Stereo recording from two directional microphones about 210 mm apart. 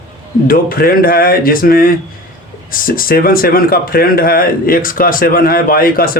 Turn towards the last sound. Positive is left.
turn(degrees=45)  # may be behind; listen again after turning